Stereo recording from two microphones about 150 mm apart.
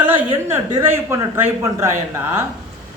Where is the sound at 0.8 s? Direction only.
15° right (ahead or behind).